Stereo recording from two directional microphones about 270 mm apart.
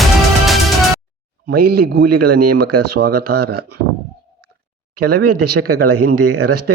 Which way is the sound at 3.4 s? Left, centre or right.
Right.